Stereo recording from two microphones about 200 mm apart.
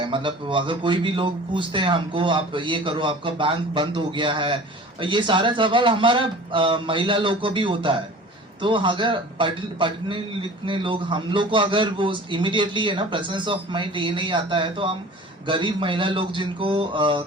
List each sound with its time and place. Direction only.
0.0 s speech: 25° right (ahead or behind)